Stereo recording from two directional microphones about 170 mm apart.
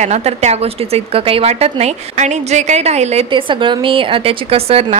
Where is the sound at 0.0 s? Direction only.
40° right (ahead or behind).